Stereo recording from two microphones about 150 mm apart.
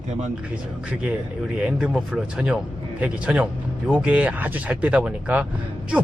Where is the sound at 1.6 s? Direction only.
5° right (ahead or behind).